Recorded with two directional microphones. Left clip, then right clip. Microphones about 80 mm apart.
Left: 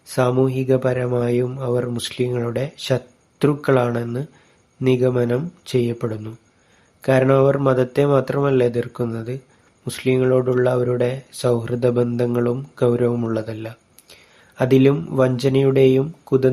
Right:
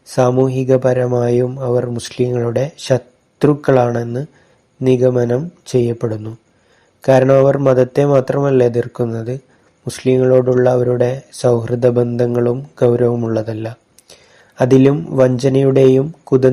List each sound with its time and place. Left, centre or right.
0.1 s speech: right
1.5 s speech: right
2.2 s speech: right
13.3 s a sound: right
15.1 s speech: right